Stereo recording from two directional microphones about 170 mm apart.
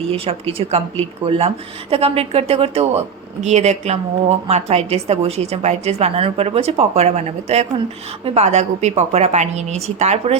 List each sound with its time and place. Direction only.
0.1 s a woman's voice: 35° right (ahead or behind)